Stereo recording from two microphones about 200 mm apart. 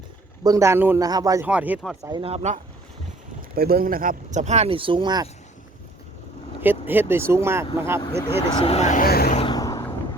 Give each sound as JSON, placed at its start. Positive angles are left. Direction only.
{"t": 0.4, "sound": "speech", "side_deg": -15}
{"t": 1.5, "sound": "speech", "side_deg": -5}
{"t": 2.0, "sound": "speech", "side_deg": -15}
{"t": 2.2, "sound": "speech", "side_deg": -35}
{"t": 3.5, "sound": "speech", "side_deg": -50}
{"t": 6.6, "sound": "speech", "side_deg": -10}
{"t": 8.6, "sound": "speech", "side_deg": 30}
{"t": 9.3, "sound": "a sound", "side_deg": 25}